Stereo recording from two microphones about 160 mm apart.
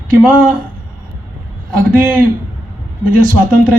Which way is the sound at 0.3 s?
60° right (ahead or behind).